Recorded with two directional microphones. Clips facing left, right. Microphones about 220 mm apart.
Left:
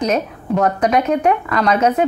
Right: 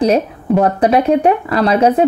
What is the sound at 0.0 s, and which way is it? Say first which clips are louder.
Speech: right 5 dB; 30° right (ahead or behind).